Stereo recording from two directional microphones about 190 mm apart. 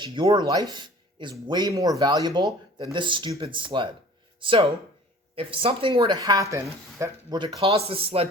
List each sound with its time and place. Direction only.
0.0 s speech: 25° right (ahead or behind)